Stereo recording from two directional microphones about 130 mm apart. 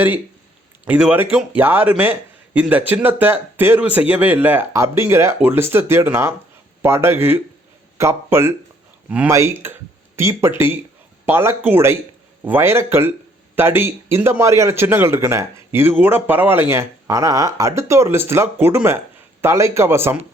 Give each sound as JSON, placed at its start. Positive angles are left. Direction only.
{"t": 0.9, "sound": "a man's voice", "side_deg": -10}